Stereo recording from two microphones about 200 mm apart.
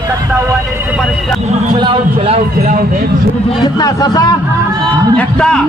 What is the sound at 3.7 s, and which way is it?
Speech, 20° left (ahead or behind).